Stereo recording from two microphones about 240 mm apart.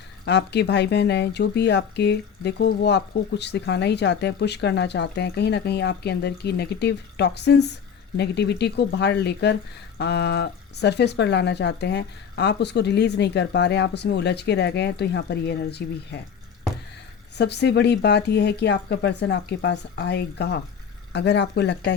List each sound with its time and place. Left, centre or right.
0.3 s speech: left
17.3 s speech: left